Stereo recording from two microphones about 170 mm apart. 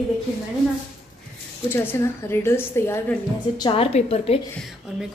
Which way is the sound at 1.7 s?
15° left (ahead or behind).